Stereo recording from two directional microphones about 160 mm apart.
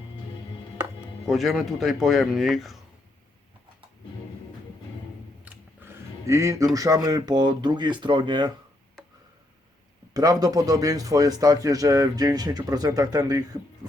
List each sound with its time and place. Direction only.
1.2 s speech: centre (ahead or behind)
5.5 s a sound: 15° right (ahead or behind)
6.7 s a man's voice: 20° right (ahead or behind)
10.2 s a man's voice: 25° right (ahead or behind)